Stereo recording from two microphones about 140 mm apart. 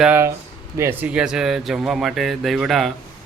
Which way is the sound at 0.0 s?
15° right (ahead or behind).